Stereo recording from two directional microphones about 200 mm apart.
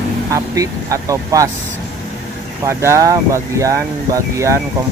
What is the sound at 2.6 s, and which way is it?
Speech, 15° right (ahead or behind).